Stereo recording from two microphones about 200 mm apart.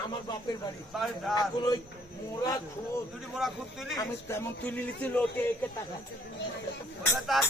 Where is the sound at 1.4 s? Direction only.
20° left (ahead or behind).